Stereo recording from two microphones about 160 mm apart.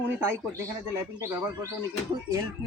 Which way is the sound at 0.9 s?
20° right (ahead or behind).